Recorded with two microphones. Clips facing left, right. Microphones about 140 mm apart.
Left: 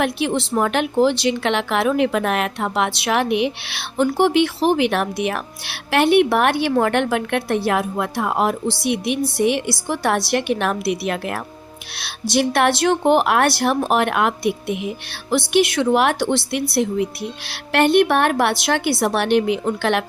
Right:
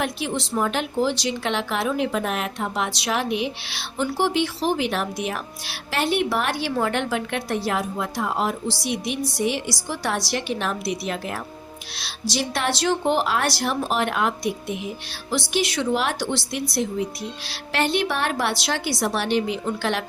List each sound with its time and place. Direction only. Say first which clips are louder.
0.0 s a woman's voice: left 6 dB; 65° left (ahead or behind)